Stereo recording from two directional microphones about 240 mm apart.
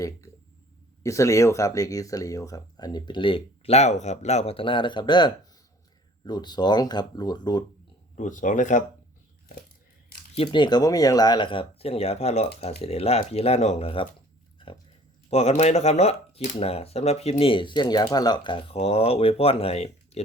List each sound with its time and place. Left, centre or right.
1.0 s speech: centre
8.1 s speech: left
10.3 s speech: left
15.3 s speech: left